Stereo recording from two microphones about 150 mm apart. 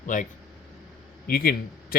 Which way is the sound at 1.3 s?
85° left.